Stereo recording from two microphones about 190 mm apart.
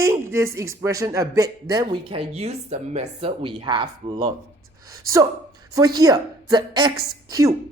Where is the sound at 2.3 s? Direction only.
35° right (ahead or behind).